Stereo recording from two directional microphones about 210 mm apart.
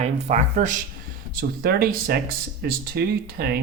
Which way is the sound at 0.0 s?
35° right (ahead or behind).